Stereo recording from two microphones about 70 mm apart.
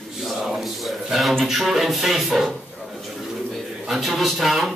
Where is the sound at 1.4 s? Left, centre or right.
Centre.